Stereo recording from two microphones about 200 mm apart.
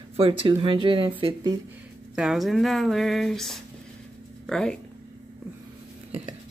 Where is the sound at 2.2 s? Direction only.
Centre (ahead or behind).